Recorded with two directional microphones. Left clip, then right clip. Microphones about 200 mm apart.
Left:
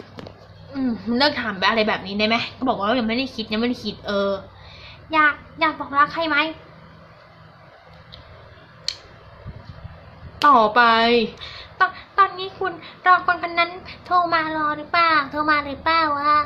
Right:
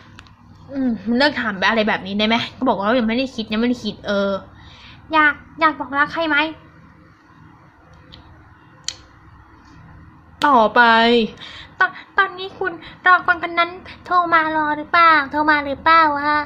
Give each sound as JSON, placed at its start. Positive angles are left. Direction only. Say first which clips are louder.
{"t": 0.7, "sound": "a woman's voice", "louder": "right 3 dB", "side_deg": -15}
{"t": 8.9, "sound": "a sound", "louder": "left 1 dB", "side_deg": -20}
{"t": 10.5, "sound": "a woman's voice", "louder": "right 3 dB", "side_deg": -20}